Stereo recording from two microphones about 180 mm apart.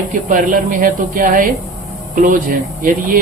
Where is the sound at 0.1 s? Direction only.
45° right (ahead or behind).